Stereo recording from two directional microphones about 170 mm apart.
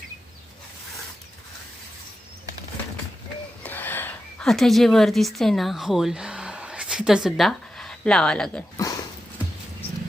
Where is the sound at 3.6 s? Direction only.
10° left (ahead or behind).